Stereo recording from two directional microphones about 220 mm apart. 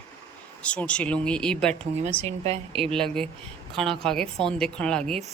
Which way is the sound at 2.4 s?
30° right (ahead or behind).